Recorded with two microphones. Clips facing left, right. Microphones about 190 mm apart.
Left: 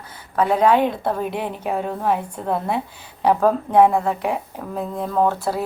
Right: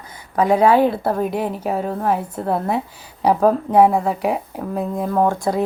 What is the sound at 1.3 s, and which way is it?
Speech, 40° right (ahead or behind).